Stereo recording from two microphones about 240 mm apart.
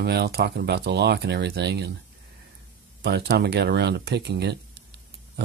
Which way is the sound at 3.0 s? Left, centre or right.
Right.